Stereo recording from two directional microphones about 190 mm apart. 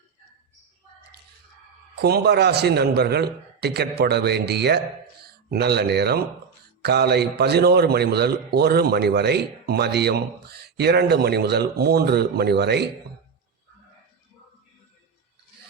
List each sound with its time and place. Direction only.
2.0 s a man's voice: 55° right (ahead or behind)